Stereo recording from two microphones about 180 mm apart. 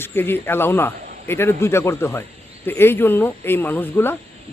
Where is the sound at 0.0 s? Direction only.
10° left (ahead or behind).